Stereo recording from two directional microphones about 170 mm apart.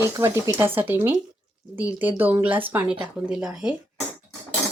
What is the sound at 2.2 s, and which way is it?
Speech, 10° right (ahead or behind).